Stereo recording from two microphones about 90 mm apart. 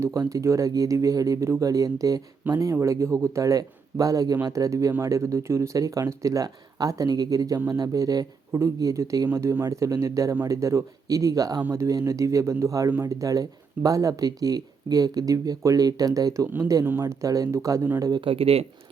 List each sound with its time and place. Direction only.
0.0 s speech: 40° right (ahead or behind)
18.3 s speech: 90° right